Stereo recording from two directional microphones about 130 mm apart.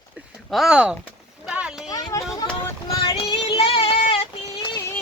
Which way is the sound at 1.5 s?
10° right (ahead or behind).